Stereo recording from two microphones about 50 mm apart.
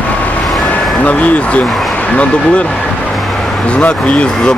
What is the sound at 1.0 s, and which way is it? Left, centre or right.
Speech, left.